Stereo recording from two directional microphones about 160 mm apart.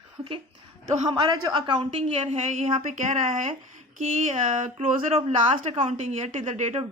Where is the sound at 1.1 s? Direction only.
25° right (ahead or behind).